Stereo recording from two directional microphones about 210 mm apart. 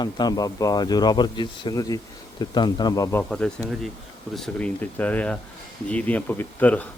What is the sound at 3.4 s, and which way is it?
Speech, 5° left (ahead or behind).